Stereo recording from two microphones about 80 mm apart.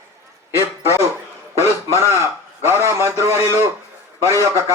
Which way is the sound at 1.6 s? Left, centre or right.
Right.